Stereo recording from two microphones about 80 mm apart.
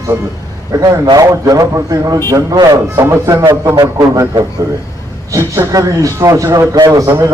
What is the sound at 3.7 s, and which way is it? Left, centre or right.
A man's voice, right.